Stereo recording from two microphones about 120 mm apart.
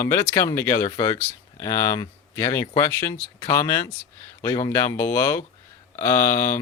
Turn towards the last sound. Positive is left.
turn(degrees=20)  # may be behind; listen again after turning